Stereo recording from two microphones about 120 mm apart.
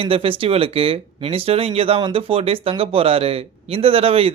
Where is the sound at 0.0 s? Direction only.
50° right (ahead or behind).